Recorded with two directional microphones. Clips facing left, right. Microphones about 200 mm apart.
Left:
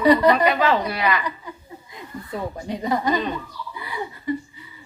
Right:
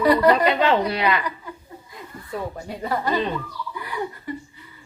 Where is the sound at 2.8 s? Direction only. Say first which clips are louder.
Left 2 dB; 15° left (ahead or behind).